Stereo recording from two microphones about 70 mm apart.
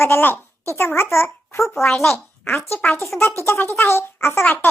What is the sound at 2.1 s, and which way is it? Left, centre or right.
A child's voice, left.